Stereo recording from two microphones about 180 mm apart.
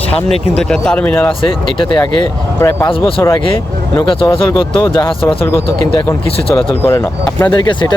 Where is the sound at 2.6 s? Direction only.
15° left (ahead or behind).